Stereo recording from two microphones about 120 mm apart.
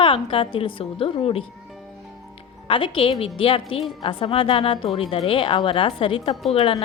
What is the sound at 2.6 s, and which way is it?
A woman's voice, 45° left (ahead or behind).